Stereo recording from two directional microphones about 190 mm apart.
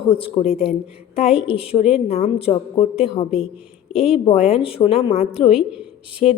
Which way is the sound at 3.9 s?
5° right (ahead or behind).